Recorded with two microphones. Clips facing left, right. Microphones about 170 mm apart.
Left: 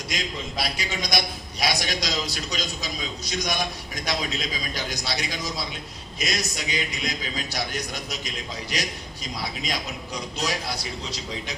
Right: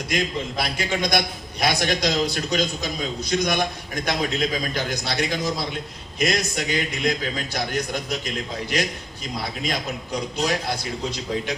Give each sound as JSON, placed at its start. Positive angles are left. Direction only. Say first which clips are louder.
{"t": 0.1, "sound": "a man's voice", "louder": "right 7 dB", "side_deg": -55}
{"t": 10.4, "sound": "a man's voice", "louder": "right 4 dB", "side_deg": -55}